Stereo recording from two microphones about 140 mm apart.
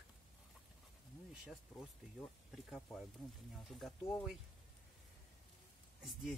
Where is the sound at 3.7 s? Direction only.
Centre (ahead or behind).